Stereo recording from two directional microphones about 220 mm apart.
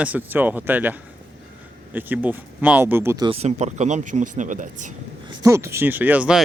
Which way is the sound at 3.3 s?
30° right (ahead or behind).